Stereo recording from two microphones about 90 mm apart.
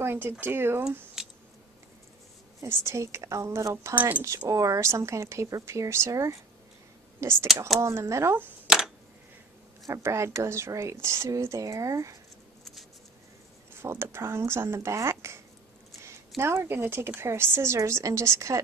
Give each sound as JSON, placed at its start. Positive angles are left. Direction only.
{"t": 0.0, "sound": "a woman's voice", "side_deg": -25}
{"t": 1.2, "sound": "squish", "side_deg": -5}
{"t": 2.6, "sound": "speech", "side_deg": -30}
{"t": 3.9, "sound": "a woman's voice", "side_deg": -20}
{"t": 4.5, "sound": "speech", "side_deg": -40}
{"t": 8.6, "sound": "a sound", "side_deg": -5}
{"t": 9.8, "sound": "speech", "side_deg": -35}
{"t": 13.7, "sound": "a woman's voice", "side_deg": -30}